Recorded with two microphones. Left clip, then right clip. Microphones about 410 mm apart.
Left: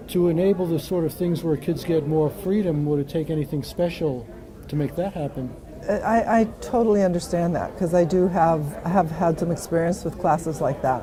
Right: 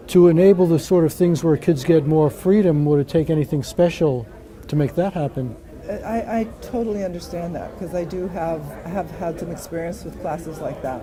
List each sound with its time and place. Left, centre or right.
0.1 s speech: right
5.9 s a woman's voice: left